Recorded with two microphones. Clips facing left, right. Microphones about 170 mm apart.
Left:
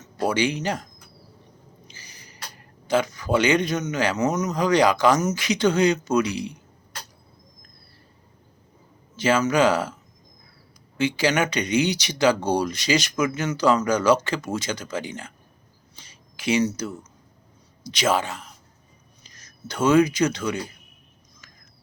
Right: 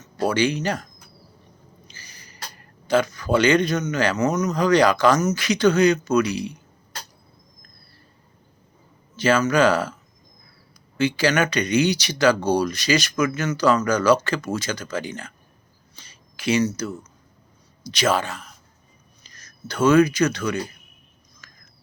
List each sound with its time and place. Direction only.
0.0 s speech: 20° left (ahead or behind)
1.9 s speech: 20° left (ahead or behind)
9.1 s speech: 20° left (ahead or behind)
10.9 s speech: 20° left (ahead or behind)
16.0 s a sound: 20° left (ahead or behind)
17.9 s speech: 20° left (ahead or behind)
21.4 s whispering: 20° left (ahead or behind)